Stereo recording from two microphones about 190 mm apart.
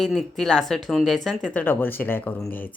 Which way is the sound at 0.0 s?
Centre (ahead or behind).